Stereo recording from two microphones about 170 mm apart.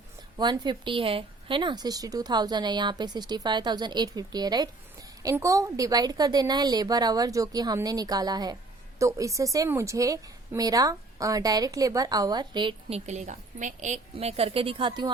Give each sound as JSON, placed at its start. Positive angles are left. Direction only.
{"t": 0.3, "sound": "speech", "side_deg": -25}
{"t": 13.1, "sound": "a woman's voice", "side_deg": -45}